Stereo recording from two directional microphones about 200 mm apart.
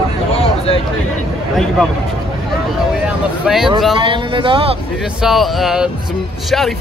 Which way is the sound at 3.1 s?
Centre (ahead or behind).